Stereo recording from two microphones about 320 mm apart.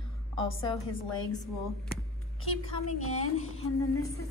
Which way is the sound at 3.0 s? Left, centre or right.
Left.